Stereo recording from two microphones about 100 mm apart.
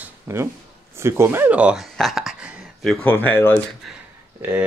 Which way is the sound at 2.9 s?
20° left (ahead or behind).